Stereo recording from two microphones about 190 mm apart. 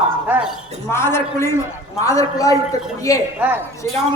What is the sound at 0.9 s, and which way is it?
A man's voice, 15° left (ahead or behind).